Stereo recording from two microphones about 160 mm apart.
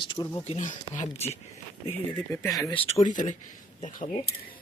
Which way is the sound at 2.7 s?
40° left (ahead or behind).